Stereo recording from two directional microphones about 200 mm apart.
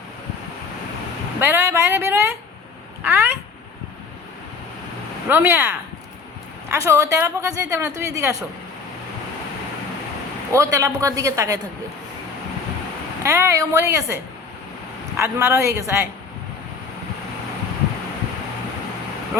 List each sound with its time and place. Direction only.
1.4 s a woman's voice: 10° right (ahead or behind)
5.3 s a woman's voice: 10° right (ahead or behind)
10.5 s a woman's voice: 15° right (ahead or behind)
13.2 s a woman's voice: 15° right (ahead or behind)